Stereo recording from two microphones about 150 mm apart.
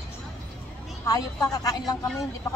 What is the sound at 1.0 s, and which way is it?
Speech, 25° left (ahead or behind).